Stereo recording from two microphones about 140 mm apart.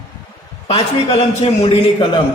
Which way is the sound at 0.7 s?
45° left (ahead or behind).